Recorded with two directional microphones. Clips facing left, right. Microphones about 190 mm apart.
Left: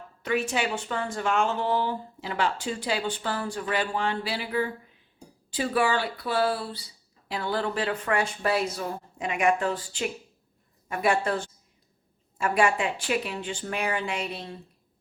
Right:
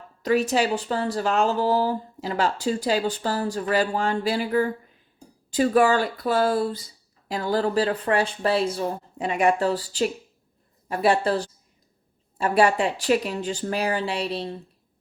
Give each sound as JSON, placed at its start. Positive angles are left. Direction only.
{"t": 0.2, "sound": "a woman's voice", "side_deg": -40}